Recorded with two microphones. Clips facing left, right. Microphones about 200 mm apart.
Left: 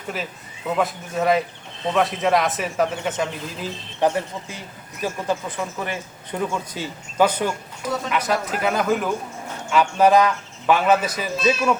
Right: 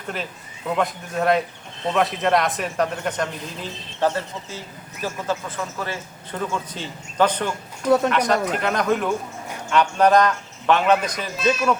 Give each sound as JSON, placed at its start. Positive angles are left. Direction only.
{"t": 0.1, "sound": "speech", "side_deg": 5}
{"t": 4.0, "sound": "a man's voice", "side_deg": 15}